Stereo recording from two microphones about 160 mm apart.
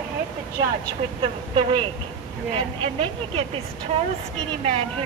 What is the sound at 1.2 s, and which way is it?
Speech, 30° right (ahead or behind).